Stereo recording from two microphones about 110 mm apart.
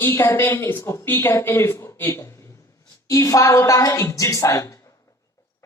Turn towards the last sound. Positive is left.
turn(degrees=25)  # may be behind; listen again after turning